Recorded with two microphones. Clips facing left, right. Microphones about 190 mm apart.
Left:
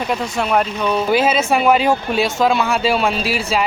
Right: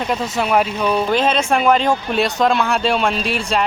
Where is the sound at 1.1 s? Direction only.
5° left (ahead or behind).